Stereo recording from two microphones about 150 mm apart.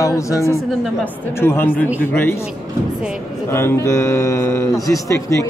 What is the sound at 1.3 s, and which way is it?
Speech, 15° left (ahead or behind).